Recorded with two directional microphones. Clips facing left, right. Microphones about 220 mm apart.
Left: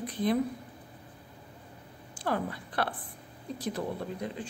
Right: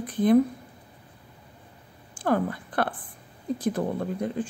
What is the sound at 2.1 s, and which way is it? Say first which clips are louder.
A woman's voice: right 7 dB; 50° right (ahead or behind).